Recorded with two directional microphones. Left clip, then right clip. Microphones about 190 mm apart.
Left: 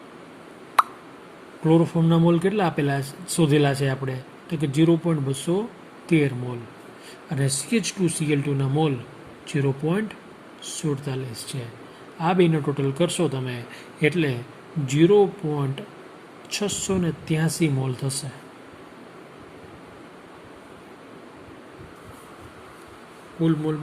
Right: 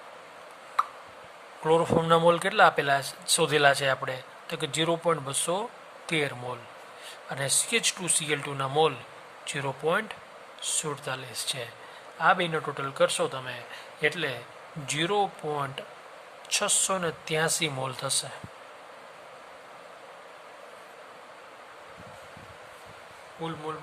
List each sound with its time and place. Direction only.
1.6 s speech: 15° right (ahead or behind)
14.8 s speech: 20° right (ahead or behind)